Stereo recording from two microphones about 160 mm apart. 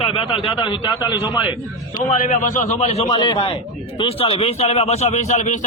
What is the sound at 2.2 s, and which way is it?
Speech, 55° left (ahead or behind).